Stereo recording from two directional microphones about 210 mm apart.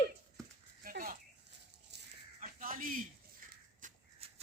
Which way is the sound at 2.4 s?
40° right (ahead or behind).